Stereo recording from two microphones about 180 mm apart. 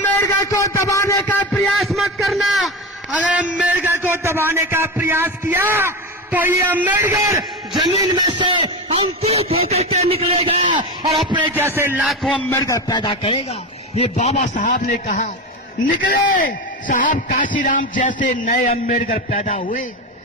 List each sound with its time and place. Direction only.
0.0 s a sound: 15° left (ahead or behind)
1.6 s a man's voice: centre (ahead or behind); by 10.8 s 30° right (ahead or behind)
11.5 s a man's voice: 15° right (ahead or behind)
12.0 s a man's voice: centre (ahead or behind)
12.5 s a man's voice: 15° left (ahead or behind); by 19.8 s 40° left (ahead or behind)